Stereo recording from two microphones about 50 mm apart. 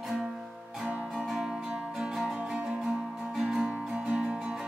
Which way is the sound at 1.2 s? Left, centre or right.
Centre.